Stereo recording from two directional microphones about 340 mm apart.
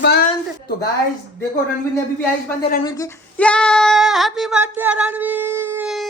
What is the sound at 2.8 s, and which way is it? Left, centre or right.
Female singing, centre.